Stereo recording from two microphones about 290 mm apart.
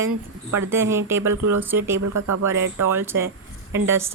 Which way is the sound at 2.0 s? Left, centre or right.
Right.